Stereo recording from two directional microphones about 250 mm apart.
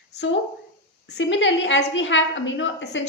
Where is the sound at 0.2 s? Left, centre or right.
Left.